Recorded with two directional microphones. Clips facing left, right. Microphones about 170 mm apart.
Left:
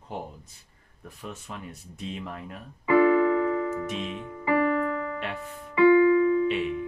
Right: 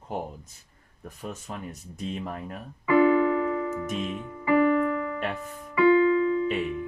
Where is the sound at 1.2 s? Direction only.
40° right (ahead or behind).